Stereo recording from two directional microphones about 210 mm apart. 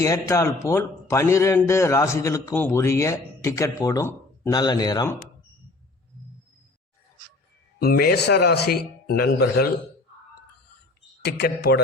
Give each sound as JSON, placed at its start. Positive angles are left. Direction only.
{"t": 0.0, "sound": "a man's voice", "side_deg": 15}
{"t": 7.8, "sound": "a man's voice", "side_deg": 45}
{"t": 11.2, "sound": "a man's voice", "side_deg": 50}